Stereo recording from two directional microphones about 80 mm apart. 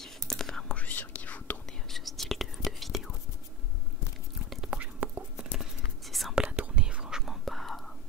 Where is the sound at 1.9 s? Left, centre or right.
Centre.